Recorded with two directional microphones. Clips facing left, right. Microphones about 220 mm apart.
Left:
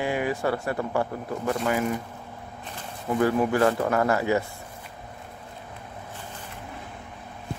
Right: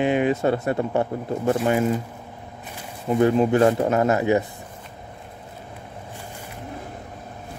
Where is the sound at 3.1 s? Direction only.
20° right (ahead or behind).